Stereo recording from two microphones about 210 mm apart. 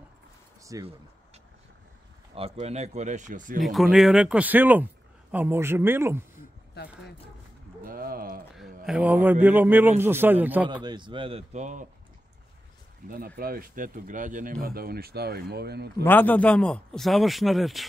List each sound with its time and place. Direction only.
0.6 s a sound: 15° right (ahead or behind)
2.3 s speech: 30° right (ahead or behind)
3.6 s a man's voice: centre (ahead or behind)
6.7 s speech: 50° left (ahead or behind)
7.8 s a sound: 45° right (ahead or behind)
8.5 s a man's voice: 5° right (ahead or behind)
10.7 s a man's voice: 20° right (ahead or behind); by 11.9 s 35° right (ahead or behind)
13.1 s speech: 45° right (ahead or behind)
16.0 s speech: 10° left (ahead or behind)